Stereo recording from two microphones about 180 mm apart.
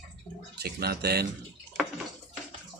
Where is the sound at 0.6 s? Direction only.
60° right (ahead or behind).